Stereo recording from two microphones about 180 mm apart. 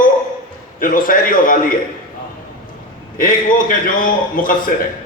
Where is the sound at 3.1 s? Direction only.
50° left (ahead or behind).